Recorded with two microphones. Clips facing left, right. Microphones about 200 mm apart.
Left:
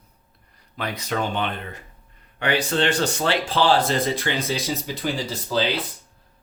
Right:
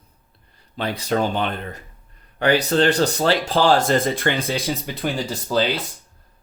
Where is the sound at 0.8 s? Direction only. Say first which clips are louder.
Right 5 dB; 30° right (ahead or behind); by 4.6 s 55° right (ahead or behind).